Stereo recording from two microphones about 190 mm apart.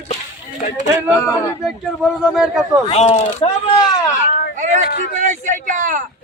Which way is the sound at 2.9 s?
30° left (ahead or behind).